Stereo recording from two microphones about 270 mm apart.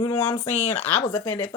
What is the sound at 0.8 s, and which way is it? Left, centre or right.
Speech, centre.